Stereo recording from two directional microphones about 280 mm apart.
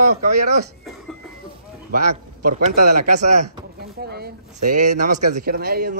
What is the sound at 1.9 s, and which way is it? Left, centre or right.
A man's voice, right.